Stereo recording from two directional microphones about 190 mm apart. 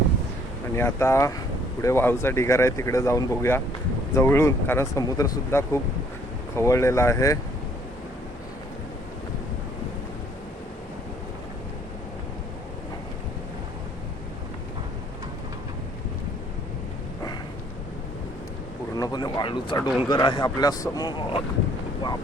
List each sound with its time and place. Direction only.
0.8 s speech: 15° left (ahead or behind)
18.9 s a sound: 20° left (ahead or behind)
20.1 s speech: 25° left (ahead or behind)